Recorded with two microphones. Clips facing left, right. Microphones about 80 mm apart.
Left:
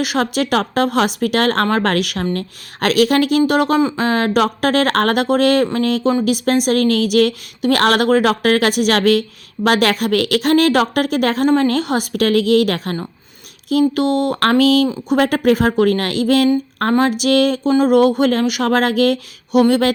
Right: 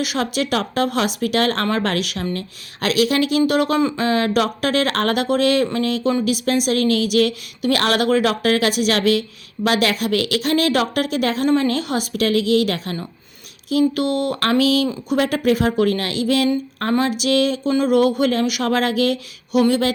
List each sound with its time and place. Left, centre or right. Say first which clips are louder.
0.0 s a woman's voice: left 4 dB; left
17.7 s a woman's voice: left 4 dB; left